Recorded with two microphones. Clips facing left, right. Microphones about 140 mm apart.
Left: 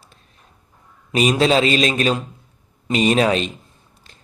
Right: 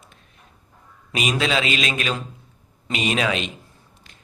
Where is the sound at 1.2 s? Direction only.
35° left (ahead or behind).